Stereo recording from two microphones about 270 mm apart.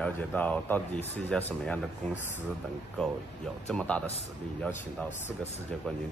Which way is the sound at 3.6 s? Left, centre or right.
Centre.